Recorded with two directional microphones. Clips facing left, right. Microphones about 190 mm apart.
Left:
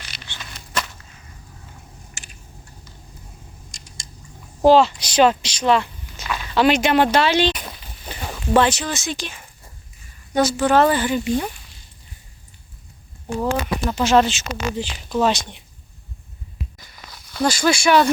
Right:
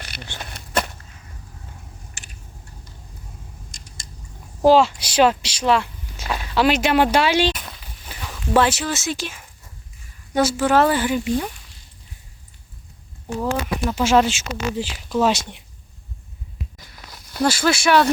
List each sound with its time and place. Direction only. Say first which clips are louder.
0.0 s a sound: right 5 dB; 55° right (ahead or behind)
4.6 s speech: left 1 dB; 5° right (ahead or behind)
13.5 s speech: right 1 dB; 5° right (ahead or behind)
17.3 s speech: even; 5° right (ahead or behind)